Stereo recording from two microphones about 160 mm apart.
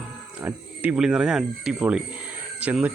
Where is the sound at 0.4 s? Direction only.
10° right (ahead or behind).